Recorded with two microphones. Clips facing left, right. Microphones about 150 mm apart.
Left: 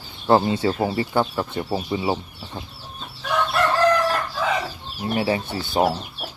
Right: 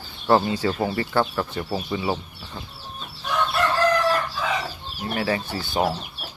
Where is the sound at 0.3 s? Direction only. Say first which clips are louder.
Left 2 dB; 25° left (ahead or behind).